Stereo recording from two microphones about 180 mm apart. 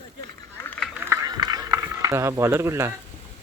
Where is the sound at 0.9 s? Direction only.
15° right (ahead or behind).